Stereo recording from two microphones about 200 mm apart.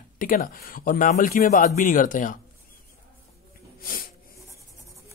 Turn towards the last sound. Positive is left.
turn(degrees=45)  # may be behind; listen again after turning